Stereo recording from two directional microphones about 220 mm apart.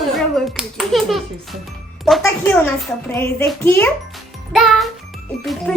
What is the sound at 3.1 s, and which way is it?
Music, 10° left (ahead or behind).